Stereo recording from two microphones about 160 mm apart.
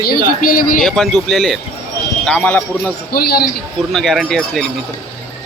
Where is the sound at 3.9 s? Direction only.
Centre (ahead or behind).